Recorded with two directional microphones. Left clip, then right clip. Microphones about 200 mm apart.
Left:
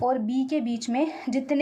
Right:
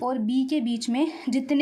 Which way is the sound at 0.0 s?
50° right (ahead or behind).